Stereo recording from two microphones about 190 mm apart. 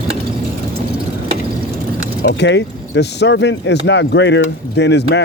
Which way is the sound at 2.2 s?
65° left (ahead or behind).